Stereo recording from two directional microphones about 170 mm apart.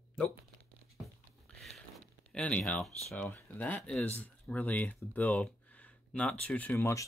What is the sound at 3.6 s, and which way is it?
Speech, 5° left (ahead or behind).